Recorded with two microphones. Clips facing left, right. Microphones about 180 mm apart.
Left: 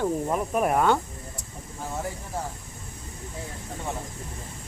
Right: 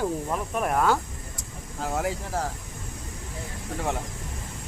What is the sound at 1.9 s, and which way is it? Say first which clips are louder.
Speech: right 4 dB; 90° right.